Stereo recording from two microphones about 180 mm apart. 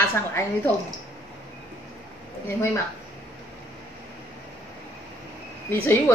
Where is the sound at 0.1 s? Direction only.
15° left (ahead or behind).